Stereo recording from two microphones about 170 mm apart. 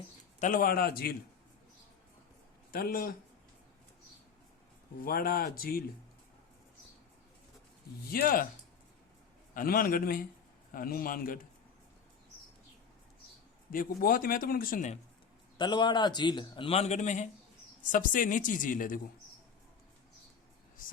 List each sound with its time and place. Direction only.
0.3 s speech: 50° left (ahead or behind); by 1.1 s 65° left (ahead or behind)
2.7 s speech: 60° left (ahead or behind)
5.0 s speech: 60° left (ahead or behind)
8.1 s speech: 60° left (ahead or behind)
9.6 s speech: 60° left (ahead or behind)
13.7 s speech: 55° left (ahead or behind)
15.5 s a man's voice: 25° left (ahead or behind); by 18.9 s 50° left (ahead or behind)